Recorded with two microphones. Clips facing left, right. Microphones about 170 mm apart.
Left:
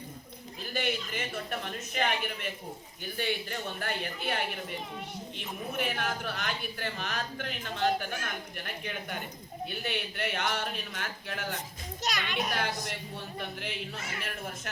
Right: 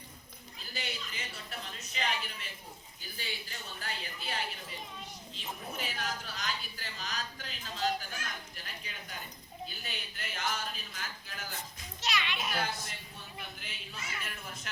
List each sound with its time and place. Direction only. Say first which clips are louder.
0.7 s a woman's voice: left 10 dB; 55° left (ahead or behind)
12.0 s a child's voice: left 3 dB; 45° left (ahead or behind)
12.8 s a man's voice: left 8 dB; 70° left (ahead or behind); by 14.7 s 55° left (ahead or behind)